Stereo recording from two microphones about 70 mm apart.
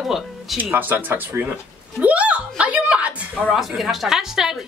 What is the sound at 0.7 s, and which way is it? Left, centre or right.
Speech, right.